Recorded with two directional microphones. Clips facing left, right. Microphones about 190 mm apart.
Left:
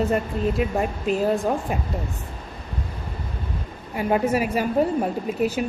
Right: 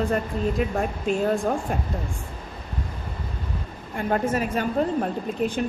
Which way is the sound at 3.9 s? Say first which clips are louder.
Left 3 dB; 10° left (ahead or behind).